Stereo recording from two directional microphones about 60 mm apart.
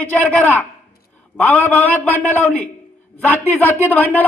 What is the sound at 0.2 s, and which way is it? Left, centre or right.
A man's voice, left.